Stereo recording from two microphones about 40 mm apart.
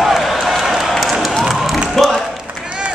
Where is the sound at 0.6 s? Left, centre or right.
Centre.